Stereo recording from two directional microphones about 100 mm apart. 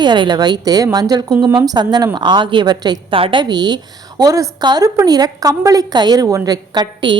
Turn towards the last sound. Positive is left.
turn(degrees=-50)  # may be behind; listen again after turning